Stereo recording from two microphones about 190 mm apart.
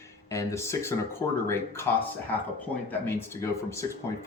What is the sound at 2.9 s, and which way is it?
Speech, 15° left (ahead or behind).